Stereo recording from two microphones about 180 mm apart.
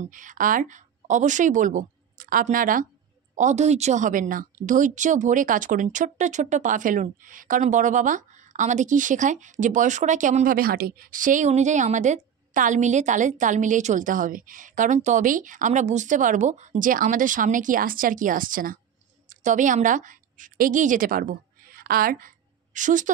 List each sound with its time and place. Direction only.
0.0 s a woman's voice: 45° right (ahead or behind)